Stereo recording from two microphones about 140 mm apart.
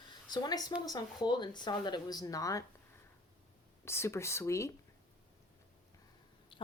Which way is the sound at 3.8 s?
20° left (ahead or behind).